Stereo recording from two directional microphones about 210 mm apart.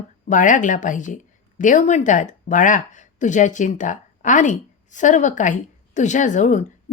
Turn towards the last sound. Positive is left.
turn(degrees=35)  # may be behind; listen again after turning